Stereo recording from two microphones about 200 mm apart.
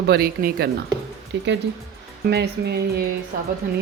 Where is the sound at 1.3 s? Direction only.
60° right (ahead or behind).